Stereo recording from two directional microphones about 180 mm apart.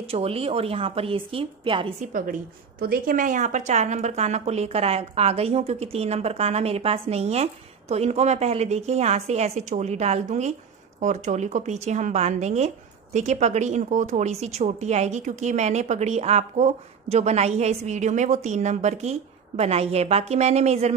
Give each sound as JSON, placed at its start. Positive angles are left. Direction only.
{"t": 0.1, "sound": "speech", "side_deg": -35}
{"t": 2.8, "sound": "speech", "side_deg": -55}